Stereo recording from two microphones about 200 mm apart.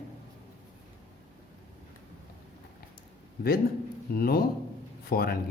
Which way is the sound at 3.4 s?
50° left (ahead or behind).